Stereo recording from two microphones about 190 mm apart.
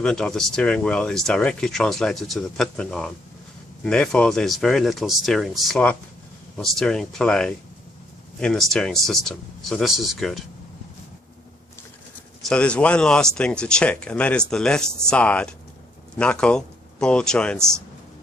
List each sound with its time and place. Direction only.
0.0 s speech: 5° left (ahead or behind)
12.4 s speech: 5° left (ahead or behind)